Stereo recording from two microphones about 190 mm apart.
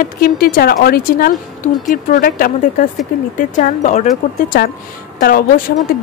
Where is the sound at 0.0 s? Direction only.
50° left (ahead or behind).